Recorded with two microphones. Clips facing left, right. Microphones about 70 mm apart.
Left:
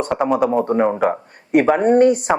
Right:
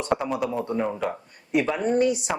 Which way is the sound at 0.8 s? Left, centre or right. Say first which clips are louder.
Left 10 dB; left.